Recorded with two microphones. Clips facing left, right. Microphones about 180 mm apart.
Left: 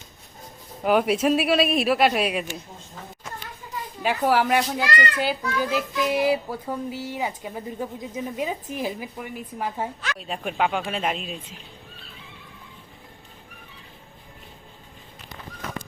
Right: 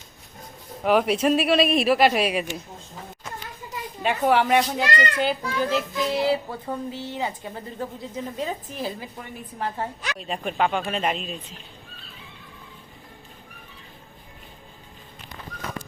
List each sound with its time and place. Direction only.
0.9 s speech: centre (ahead or behind)
4.0 s a woman's voice: 5° left (ahead or behind)